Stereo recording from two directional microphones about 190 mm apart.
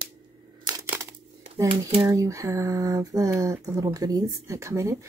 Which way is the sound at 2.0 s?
15° right (ahead or behind).